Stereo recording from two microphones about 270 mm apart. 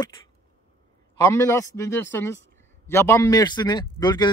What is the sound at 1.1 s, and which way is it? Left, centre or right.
A man's voice, centre.